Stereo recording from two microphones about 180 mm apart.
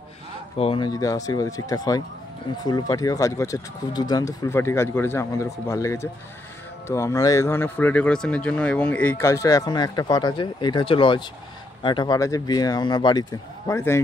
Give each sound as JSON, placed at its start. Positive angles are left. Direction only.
{"t": 0.6, "sound": "speech", "side_deg": 30}